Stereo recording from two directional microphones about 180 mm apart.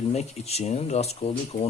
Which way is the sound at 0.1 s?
35° left (ahead or behind).